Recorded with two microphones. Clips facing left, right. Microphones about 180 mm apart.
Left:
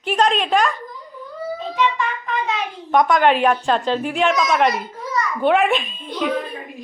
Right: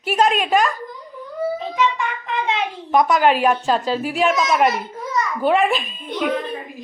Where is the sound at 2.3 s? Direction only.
20° right (ahead or behind).